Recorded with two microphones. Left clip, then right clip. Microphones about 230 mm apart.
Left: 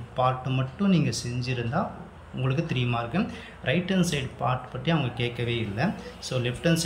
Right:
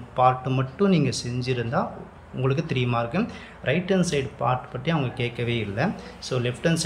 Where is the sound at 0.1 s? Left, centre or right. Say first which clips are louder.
Right 5 dB; centre.